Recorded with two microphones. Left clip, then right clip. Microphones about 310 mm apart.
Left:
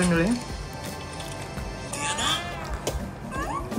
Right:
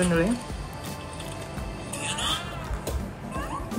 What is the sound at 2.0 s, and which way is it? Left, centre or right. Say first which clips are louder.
Music: left 3 dB; left.